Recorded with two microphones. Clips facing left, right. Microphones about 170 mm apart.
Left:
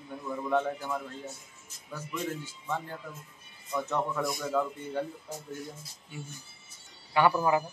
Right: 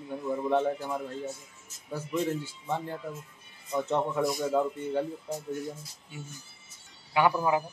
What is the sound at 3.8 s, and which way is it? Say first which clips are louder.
Speech: right 4 dB; 25° right (ahead or behind).